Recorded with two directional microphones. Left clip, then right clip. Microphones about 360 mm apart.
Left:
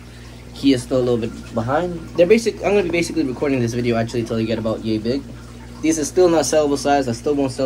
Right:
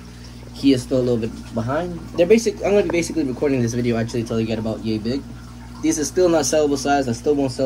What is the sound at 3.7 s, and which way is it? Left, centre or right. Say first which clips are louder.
Speech: left 2 dB; centre.